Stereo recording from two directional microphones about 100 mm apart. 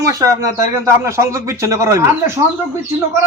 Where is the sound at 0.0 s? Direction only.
35° right (ahead or behind).